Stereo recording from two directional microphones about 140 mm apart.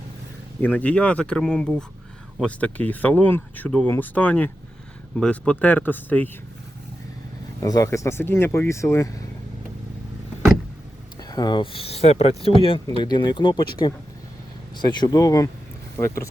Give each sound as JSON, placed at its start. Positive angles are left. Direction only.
{"t": 0.6, "sound": "speech", "side_deg": 10}
{"t": 7.6, "sound": "speech", "side_deg": 25}
{"t": 11.2, "sound": "speech", "side_deg": 30}